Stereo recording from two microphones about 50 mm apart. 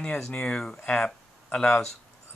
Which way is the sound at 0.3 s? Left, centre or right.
Centre.